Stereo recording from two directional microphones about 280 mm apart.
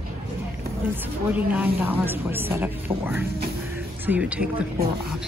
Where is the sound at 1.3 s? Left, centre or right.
Centre.